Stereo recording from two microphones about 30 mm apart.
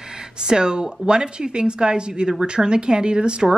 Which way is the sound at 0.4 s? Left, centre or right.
Right.